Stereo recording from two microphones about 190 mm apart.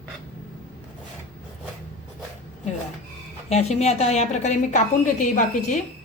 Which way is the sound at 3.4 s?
35° left (ahead or behind).